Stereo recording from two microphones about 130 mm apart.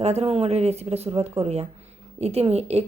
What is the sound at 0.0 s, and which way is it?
A woman's voice, 55° right (ahead or behind).